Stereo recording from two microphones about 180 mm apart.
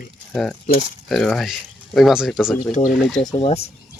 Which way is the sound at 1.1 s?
5° left (ahead or behind).